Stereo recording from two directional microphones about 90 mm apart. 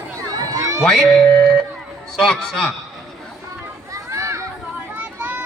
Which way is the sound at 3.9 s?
30° right (ahead or behind).